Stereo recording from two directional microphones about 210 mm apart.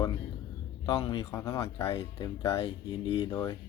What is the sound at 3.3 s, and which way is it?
Speech, 15° left (ahead or behind).